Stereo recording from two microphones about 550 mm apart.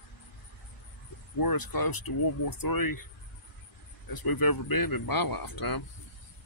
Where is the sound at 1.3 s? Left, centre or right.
Left.